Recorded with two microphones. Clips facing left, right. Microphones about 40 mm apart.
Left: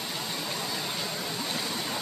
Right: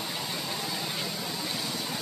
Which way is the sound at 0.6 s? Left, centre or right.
Centre.